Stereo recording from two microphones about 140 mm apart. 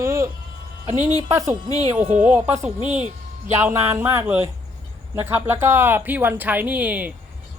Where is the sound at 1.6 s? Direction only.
50° right (ahead or behind).